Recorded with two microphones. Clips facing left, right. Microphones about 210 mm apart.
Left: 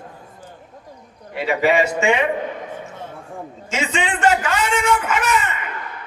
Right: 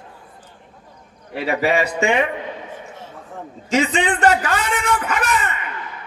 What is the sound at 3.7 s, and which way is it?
A man's voice, 35° right (ahead or behind).